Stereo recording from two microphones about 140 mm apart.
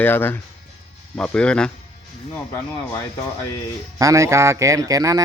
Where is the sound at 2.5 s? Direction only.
20° left (ahead or behind).